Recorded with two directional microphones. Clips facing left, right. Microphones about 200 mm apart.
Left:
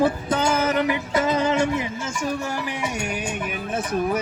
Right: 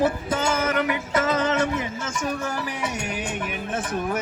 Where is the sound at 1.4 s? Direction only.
10° left (ahead or behind).